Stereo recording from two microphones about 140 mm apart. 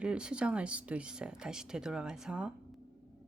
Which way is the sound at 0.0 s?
5° right (ahead or behind).